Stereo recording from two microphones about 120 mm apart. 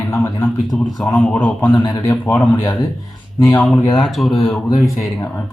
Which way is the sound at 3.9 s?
Centre (ahead or behind).